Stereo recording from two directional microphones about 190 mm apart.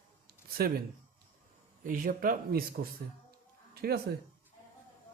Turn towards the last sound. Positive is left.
turn(degrees=-55)  # may be behind; listen again after turning